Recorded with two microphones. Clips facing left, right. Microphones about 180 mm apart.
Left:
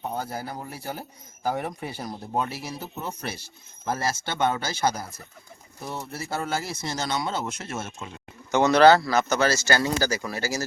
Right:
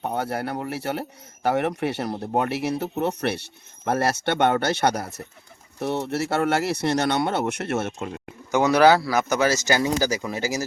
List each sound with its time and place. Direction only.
0.0 s speech: 70° right (ahead or behind)
8.5 s speech: 10° right (ahead or behind)